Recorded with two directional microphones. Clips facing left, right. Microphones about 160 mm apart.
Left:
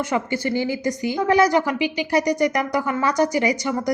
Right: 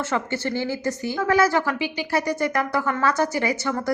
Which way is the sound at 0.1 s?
15° left (ahead or behind).